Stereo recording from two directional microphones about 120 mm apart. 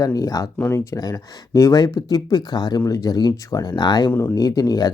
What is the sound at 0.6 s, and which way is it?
Speech, 15° left (ahead or behind).